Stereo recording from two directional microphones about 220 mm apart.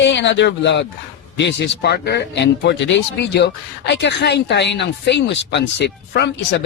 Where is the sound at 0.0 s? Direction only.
55° left (ahead or behind).